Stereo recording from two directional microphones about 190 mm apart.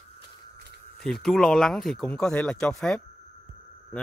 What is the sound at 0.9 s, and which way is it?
Speech, centre (ahead or behind).